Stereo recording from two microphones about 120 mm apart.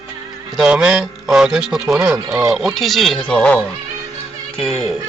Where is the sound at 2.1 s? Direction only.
5° right (ahead or behind).